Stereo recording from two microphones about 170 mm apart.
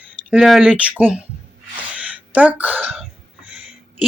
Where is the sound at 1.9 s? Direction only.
10° right (ahead or behind).